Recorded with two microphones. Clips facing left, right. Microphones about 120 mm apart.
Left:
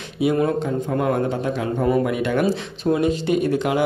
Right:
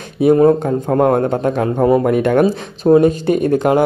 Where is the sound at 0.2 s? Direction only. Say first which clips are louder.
Right 9 dB; 40° right (ahead or behind).